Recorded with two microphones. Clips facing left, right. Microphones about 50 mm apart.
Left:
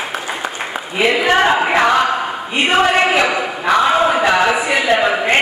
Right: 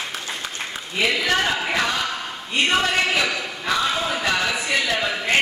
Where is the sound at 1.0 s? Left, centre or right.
Left.